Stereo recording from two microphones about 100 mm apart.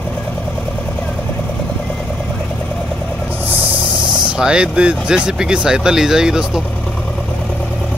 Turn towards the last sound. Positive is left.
turn(degrees=-5)  # may be behind; listen again after turning